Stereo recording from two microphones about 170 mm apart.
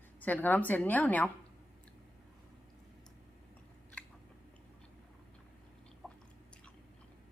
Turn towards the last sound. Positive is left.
turn(degrees=0)  # may be behind; listen again after turning